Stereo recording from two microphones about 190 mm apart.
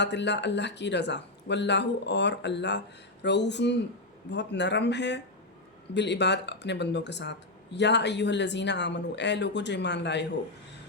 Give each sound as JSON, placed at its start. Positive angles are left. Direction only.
{"t": 0.0, "sound": "speech", "side_deg": 65}